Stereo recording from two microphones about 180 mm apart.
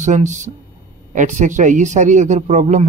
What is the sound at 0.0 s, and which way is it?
Speech, 40° right (ahead or behind).